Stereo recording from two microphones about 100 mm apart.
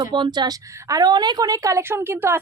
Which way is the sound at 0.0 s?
50° right (ahead or behind).